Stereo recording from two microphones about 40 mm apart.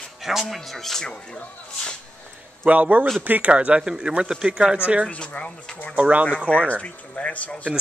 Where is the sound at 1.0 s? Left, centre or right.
Left.